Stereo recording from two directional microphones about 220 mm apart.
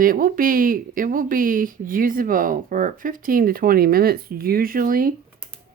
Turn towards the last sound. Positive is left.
turn(degrees=-40)  # may be behind; listen again after turning